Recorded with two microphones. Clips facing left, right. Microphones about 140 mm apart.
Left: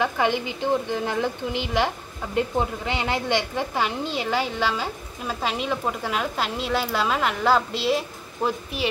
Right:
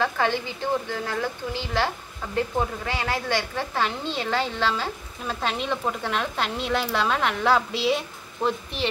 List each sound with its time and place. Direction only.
0.0 s a woman's voice: 15° left (ahead or behind)